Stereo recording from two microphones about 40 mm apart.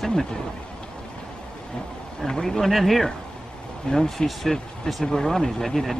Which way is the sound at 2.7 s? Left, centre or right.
Centre.